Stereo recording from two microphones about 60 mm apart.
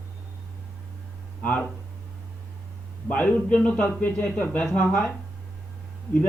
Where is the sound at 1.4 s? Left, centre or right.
Left.